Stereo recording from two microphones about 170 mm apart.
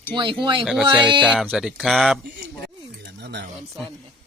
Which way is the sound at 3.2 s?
85° right.